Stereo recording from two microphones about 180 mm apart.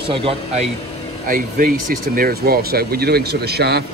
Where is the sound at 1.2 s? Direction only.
50° right (ahead or behind).